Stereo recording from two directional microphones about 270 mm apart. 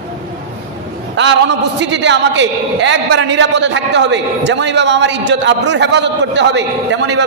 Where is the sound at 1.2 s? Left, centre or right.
Right.